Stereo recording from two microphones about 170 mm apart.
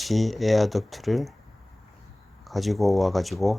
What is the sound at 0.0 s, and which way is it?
Speech, centre (ahead or behind).